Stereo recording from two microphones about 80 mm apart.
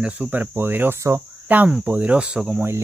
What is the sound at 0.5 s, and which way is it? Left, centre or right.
Speech, right.